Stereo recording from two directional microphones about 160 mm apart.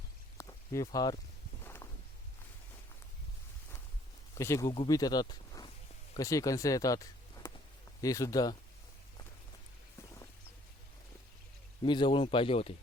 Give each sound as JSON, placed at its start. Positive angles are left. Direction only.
{"t": 0.3, "sound": "a sound", "side_deg": 20}
{"t": 1.6, "sound": "walk", "side_deg": 15}
{"t": 4.4, "sound": "speech", "side_deg": 20}
{"t": 11.8, "sound": "a man's voice", "side_deg": 30}